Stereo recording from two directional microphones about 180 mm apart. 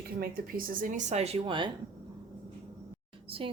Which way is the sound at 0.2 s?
50° right (ahead or behind).